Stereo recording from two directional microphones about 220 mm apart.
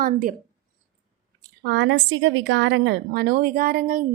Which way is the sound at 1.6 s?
55° right (ahead or behind).